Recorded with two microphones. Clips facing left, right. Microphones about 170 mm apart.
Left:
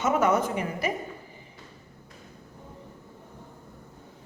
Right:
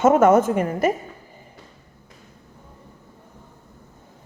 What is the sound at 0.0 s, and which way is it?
Speech, 50° right (ahead or behind).